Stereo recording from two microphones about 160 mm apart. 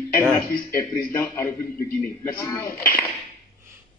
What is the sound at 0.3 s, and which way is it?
A man's voice, 15° left (ahead or behind).